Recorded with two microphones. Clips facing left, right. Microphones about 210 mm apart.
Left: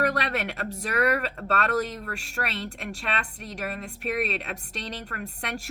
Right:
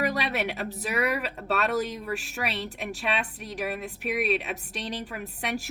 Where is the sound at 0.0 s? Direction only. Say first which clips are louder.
Left 1 dB; centre (ahead or behind).